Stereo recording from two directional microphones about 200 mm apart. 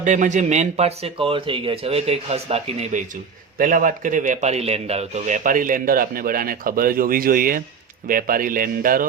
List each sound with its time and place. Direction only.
0.0 s speech: 40° right (ahead or behind)
3.6 s a man's voice: 45° right (ahead or behind)